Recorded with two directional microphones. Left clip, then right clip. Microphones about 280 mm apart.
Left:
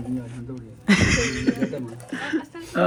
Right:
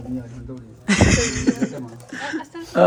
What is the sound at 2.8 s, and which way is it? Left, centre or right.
Speech, centre.